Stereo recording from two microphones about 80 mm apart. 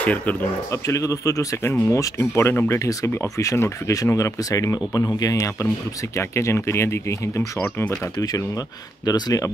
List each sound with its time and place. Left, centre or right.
0.0 s speech: centre
0.7 s speech: left
9.0 s speech: left